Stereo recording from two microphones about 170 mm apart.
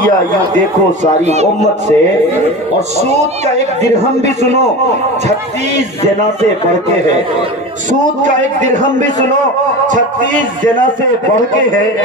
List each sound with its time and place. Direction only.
1.2 s speech: 40° right (ahead or behind)
3.8 s speech: 40° right (ahead or behind)
8.2 s music: 45° right (ahead or behind)
9.8 s music: 50° right (ahead or behind)